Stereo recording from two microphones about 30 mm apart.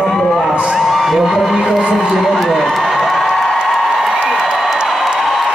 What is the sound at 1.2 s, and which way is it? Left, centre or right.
A man's voice, centre.